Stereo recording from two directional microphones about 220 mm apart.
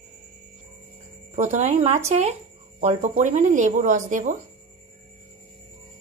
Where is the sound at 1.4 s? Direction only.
35° right (ahead or behind).